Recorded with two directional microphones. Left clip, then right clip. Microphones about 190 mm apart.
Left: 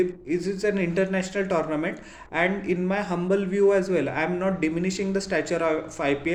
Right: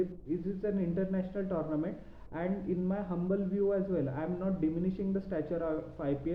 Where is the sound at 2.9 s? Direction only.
15° left (ahead or behind).